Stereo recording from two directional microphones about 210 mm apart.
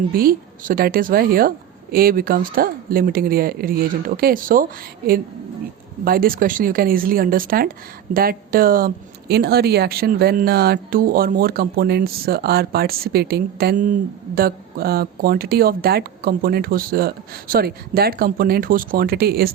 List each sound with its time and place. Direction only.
0.1 s speech: 45° right (ahead or behind)
6.1 s speech: 45° right (ahead or behind)